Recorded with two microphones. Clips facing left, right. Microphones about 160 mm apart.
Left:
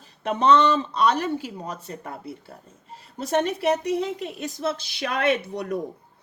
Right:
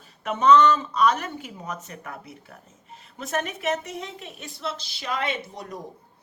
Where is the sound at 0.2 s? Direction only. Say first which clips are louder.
Right 1 dB; 35° left (ahead or behind).